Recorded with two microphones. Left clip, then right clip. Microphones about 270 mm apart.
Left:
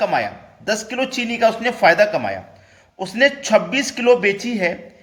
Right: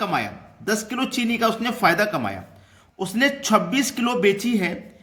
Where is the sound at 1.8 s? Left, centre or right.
Centre.